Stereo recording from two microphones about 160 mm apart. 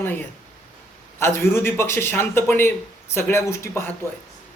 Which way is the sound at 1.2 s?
15° left (ahead or behind).